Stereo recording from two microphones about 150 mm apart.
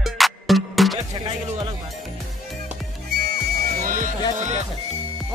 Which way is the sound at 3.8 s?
65° right (ahead or behind).